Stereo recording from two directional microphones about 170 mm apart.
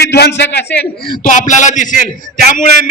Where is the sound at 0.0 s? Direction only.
75° left (ahead or behind).